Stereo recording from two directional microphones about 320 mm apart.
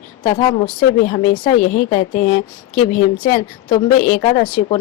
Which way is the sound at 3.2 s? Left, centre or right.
Centre.